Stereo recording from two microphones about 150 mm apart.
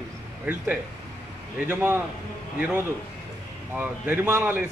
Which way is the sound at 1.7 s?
15° right (ahead or behind).